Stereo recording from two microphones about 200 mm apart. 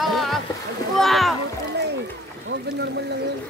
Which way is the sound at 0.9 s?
Centre (ahead or behind).